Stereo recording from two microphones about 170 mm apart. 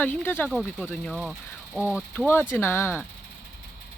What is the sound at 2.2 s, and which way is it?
Speech, 15° left (ahead or behind).